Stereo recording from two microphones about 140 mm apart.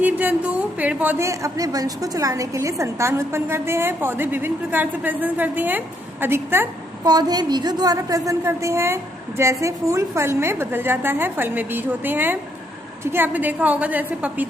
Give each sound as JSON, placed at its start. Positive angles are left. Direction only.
{"t": 0.0, "sound": "a woman's voice", "side_deg": -10}
{"t": 1.2, "sound": "a woman's voice", "side_deg": -20}
{"t": 7.0, "sound": "a woman's voice", "side_deg": -30}